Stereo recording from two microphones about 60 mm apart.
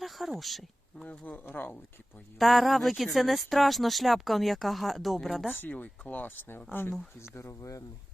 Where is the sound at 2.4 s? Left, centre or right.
Centre.